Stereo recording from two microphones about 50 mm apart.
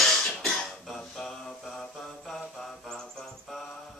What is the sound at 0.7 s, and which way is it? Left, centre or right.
Mantra, centre.